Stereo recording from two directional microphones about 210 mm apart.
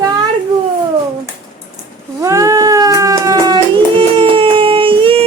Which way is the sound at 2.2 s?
15° right (ahead or behind).